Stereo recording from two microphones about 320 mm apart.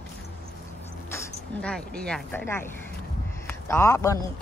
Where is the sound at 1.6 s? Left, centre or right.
Centre.